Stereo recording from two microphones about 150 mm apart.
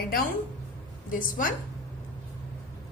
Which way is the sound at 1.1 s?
65° left (ahead or behind).